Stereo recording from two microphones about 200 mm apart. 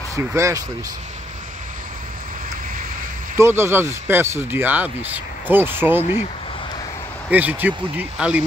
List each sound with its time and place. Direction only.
0.1 s speech: 15° right (ahead or behind)
3.3 s speech: 10° right (ahead or behind)
7.2 s speech: 10° right (ahead or behind)